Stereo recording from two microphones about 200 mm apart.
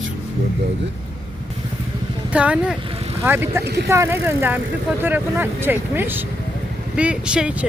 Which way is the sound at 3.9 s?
15° right (ahead or behind).